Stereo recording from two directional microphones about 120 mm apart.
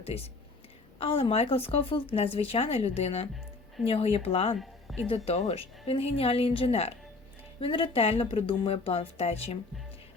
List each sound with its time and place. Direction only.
0.0 s speech: 60° left (ahead or behind)
4.6 s a sound: centre (ahead or behind)
5.0 s speech: 55° left (ahead or behind)